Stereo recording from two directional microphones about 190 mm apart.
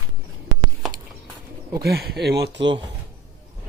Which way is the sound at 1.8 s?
55° right (ahead or behind).